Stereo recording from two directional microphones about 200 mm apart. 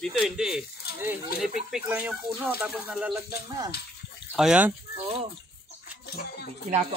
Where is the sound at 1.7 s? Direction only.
5° right (ahead or behind).